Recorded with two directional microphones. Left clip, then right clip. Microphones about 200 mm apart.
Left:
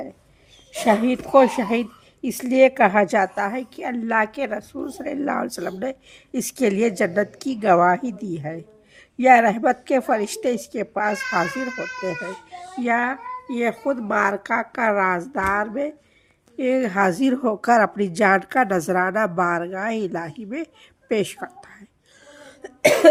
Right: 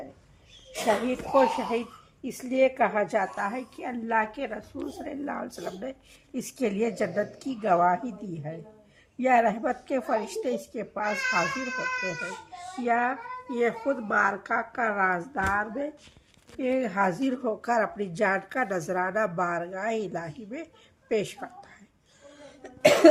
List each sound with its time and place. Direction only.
0.7 s a woman's voice: 55° left (ahead or behind)
12.8 s a woman's voice: 55° left (ahead or behind)
22.6 s cough: 50° left (ahead or behind)